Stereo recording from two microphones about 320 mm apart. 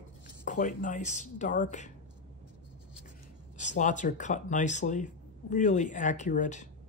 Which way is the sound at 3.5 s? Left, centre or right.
Left.